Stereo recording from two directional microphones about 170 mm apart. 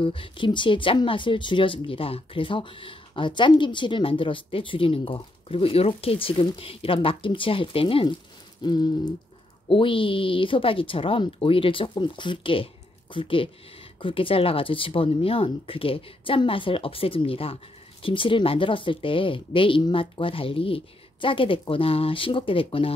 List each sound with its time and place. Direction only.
0.0 s speech: 30° left (ahead or behind)
8.6 s a sound: 25° left (ahead or behind)
9.7 s speech: 30° left (ahead or behind)